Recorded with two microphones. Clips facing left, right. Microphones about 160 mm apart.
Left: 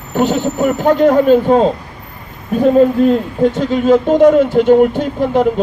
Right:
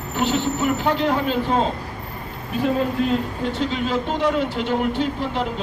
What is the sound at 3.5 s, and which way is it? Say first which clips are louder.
Speech: left 10 dB; 45° left (ahead or behind).